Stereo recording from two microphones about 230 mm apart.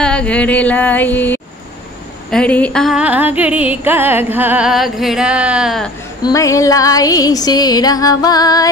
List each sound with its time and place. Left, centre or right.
0.0 s music: centre
6.2 s music: centre